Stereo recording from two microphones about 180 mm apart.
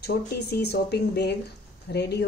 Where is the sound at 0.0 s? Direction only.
65° left (ahead or behind).